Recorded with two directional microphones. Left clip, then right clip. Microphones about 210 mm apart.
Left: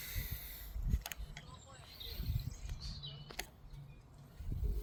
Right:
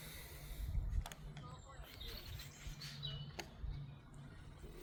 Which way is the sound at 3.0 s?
5° right (ahead or behind).